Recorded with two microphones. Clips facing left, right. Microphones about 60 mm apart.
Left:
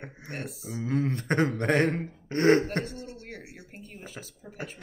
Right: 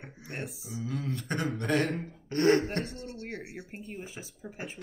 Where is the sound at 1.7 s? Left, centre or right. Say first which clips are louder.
Left 1 dB; left.